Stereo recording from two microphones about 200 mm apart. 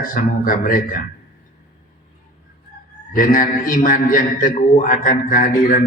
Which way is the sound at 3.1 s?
45° left (ahead or behind).